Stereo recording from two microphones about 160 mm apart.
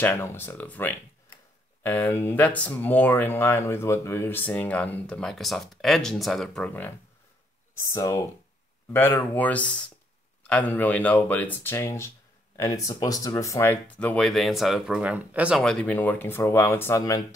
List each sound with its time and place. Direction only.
0.0 s speech: 15° left (ahead or behind)
7.8 s speech: 20° left (ahead or behind); by 15.6 s 10° right (ahead or behind)
15.6 s speech: 5° left (ahead or behind)